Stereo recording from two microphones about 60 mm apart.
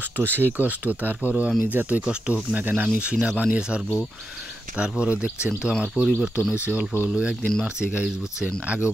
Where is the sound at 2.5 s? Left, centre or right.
Right.